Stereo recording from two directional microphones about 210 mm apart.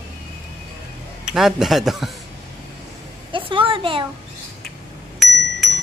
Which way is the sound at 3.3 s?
25° right (ahead or behind).